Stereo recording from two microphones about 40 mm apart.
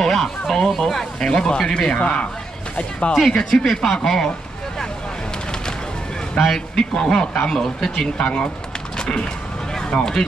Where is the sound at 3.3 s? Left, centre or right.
Centre.